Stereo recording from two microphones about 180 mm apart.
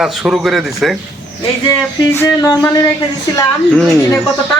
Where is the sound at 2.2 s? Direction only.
20° left (ahead or behind).